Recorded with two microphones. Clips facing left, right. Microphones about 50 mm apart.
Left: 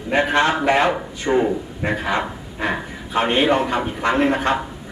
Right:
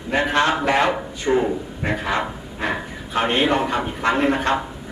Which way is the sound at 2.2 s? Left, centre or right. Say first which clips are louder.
Left 1 dB; centre.